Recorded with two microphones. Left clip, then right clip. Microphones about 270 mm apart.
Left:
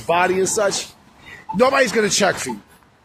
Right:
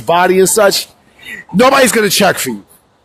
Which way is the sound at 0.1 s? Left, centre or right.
Right.